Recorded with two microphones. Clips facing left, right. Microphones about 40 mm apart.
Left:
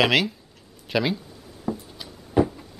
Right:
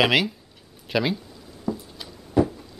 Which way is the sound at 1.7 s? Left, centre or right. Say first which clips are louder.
Right 1 dB; left.